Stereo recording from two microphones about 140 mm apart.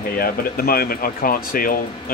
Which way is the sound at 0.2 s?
90° left.